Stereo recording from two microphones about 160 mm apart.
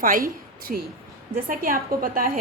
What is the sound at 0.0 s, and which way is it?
A woman's voice, 60° right (ahead or behind).